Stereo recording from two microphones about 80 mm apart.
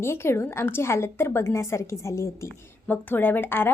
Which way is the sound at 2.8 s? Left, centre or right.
Left.